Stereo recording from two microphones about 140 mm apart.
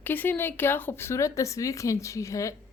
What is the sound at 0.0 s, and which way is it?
Speech, 15° left (ahead or behind).